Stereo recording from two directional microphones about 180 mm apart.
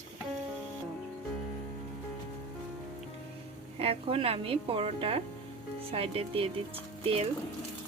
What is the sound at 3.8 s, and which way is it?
A woman's voice, 30° right (ahead or behind).